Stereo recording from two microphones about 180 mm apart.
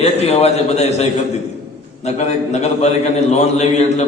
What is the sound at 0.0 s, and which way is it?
A man's voice, 35° left (ahead or behind).